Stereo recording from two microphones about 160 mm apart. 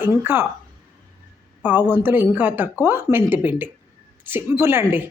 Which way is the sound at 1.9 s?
15° right (ahead or behind).